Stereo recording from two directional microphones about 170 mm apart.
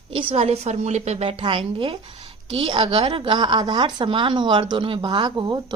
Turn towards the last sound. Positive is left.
turn(degrees=-25)  # may be behind; listen again after turning